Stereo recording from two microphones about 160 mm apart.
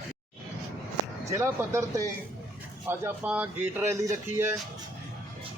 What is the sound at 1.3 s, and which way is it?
Speech, 15° right (ahead or behind).